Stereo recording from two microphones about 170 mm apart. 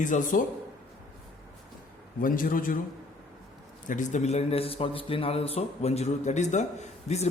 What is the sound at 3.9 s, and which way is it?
A man's voice, 45° left (ahead or behind).